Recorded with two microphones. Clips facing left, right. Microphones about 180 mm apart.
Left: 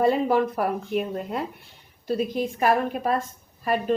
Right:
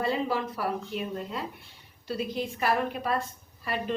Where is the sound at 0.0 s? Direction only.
50° left (ahead or behind).